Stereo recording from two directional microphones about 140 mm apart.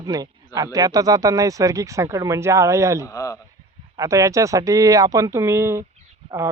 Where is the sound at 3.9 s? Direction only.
25° right (ahead or behind).